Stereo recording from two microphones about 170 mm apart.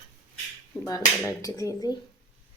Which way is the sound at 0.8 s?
20° left (ahead or behind).